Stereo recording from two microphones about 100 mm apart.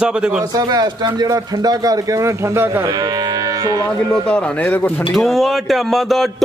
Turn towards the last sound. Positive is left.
turn(degrees=0)  # may be behind; listen again after turning